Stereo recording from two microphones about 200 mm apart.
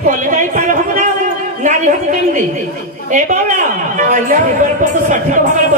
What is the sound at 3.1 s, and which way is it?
A woman's voice, 40° right (ahead or behind).